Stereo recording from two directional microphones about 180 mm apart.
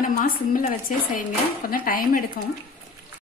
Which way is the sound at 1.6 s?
50° left (ahead or behind).